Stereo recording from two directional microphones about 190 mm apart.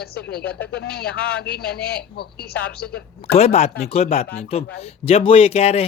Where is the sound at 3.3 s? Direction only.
35° left (ahead or behind).